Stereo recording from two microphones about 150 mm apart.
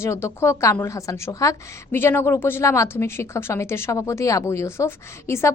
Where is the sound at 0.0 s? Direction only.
15° left (ahead or behind).